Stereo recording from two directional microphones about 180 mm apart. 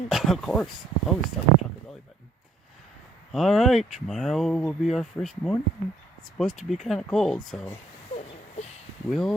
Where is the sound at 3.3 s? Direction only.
Centre (ahead or behind).